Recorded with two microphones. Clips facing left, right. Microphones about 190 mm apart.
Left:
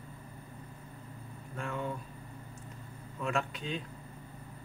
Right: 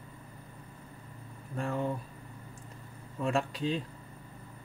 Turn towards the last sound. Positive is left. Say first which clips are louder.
# right 4 dB
turn(degrees=-35)  # may be behind; listen again after turning